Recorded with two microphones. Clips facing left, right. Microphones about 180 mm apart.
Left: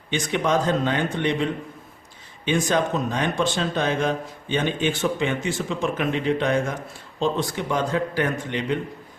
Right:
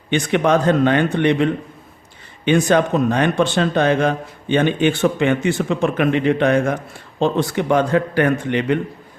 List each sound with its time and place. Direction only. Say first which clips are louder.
0.1 s speech: right 6 dB; 65° right (ahead or behind)